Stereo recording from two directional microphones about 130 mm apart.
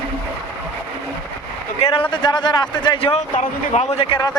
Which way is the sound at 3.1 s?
65° left (ahead or behind).